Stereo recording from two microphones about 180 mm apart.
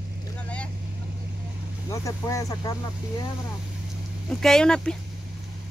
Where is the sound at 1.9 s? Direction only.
20° left (ahead or behind).